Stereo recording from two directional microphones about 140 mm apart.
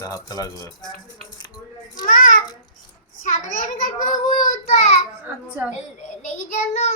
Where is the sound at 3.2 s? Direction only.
65° left (ahead or behind).